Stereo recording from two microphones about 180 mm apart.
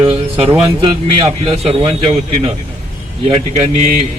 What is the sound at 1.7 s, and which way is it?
Mantra, 30° right (ahead or behind).